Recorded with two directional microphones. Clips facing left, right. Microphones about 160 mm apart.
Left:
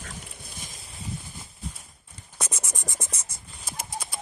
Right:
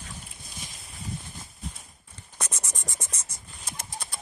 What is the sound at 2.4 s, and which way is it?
Scratch, 10° left (ahead or behind).